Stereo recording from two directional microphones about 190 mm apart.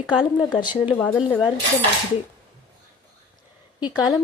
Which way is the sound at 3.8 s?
20° left (ahead or behind).